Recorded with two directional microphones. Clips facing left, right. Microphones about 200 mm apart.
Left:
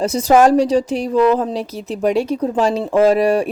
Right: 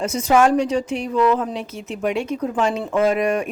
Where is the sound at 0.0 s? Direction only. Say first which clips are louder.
Left 4 dB; 35° left (ahead or behind).